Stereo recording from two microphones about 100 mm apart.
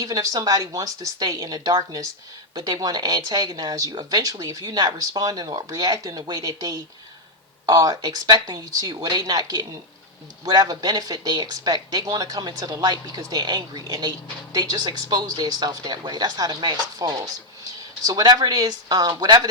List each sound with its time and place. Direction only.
0.0 s speech: 40° right (ahead or behind)